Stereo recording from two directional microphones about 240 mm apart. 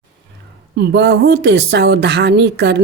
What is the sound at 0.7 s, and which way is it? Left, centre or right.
Speech, right.